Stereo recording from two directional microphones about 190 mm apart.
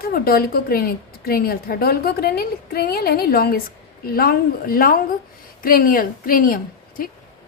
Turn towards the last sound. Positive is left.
turn(degrees=50)  # may be behind; listen again after turning